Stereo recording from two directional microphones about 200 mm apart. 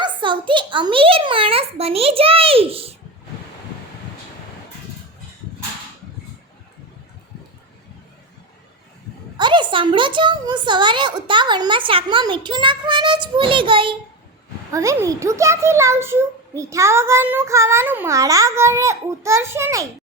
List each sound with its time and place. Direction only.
0.0 s a woman's voice: 25° right (ahead or behind)
9.4 s a woman's voice: 25° right (ahead or behind)
14.7 s a child's voice: 15° right (ahead or behind)